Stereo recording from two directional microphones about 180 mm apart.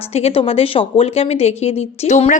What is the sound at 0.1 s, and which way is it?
Speech, 35° left (ahead or behind).